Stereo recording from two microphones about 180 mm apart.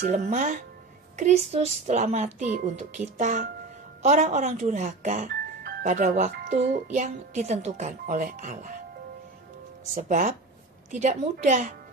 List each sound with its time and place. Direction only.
0.0 s a woman's voice: 45° right (ahead or behind)
5.6 s music: 60° right (ahead or behind)
5.9 s a woman's voice: 45° right (ahead or behind)
9.9 s a woman's voice: 45° right (ahead or behind)